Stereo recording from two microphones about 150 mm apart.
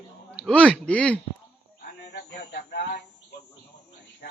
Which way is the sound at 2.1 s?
90° left.